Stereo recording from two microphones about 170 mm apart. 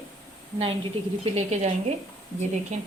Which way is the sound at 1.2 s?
40° right (ahead or behind).